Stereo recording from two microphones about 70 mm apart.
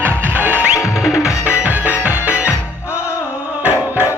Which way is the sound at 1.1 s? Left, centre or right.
Left.